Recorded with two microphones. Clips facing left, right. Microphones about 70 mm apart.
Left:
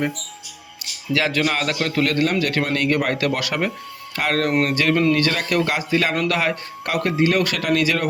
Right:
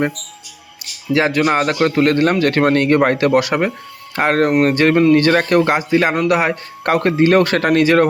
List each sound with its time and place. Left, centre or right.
1.1 s a man's voice: right
6.9 s a man's voice: right